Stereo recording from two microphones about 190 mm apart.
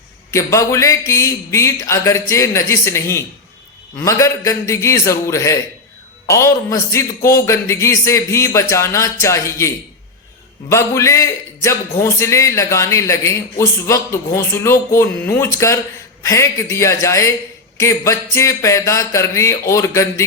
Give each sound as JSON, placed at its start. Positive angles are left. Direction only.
{"t": 0.3, "sound": "speech", "side_deg": 15}